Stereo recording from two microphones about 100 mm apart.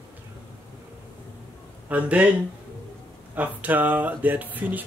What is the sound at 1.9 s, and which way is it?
Speech, 15° right (ahead or behind).